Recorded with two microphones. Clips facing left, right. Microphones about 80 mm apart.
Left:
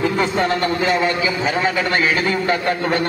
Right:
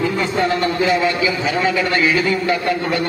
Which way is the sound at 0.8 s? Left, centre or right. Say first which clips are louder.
Right 1 dB; left.